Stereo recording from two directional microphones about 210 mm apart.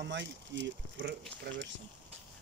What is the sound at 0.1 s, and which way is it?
Speech, 60° right (ahead or behind).